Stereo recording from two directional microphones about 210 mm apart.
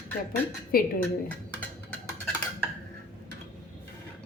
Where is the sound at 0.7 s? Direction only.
45° left (ahead or behind).